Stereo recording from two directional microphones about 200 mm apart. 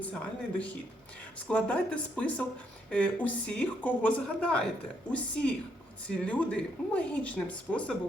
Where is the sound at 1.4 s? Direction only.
5° left (ahead or behind).